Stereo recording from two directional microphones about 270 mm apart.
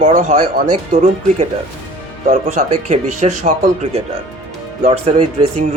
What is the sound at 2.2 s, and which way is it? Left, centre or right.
Speech, right.